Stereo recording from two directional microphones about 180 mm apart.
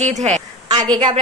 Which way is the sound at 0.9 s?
25° right (ahead or behind).